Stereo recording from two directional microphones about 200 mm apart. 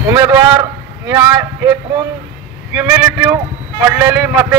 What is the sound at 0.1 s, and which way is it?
A man's voice, 20° right (ahead or behind).